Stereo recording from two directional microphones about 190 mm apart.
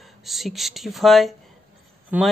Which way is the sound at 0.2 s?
Centre (ahead or behind).